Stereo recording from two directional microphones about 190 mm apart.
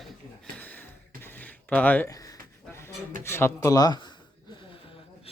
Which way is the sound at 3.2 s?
15° left (ahead or behind).